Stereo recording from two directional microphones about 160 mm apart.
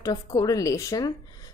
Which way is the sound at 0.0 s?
25° left (ahead or behind).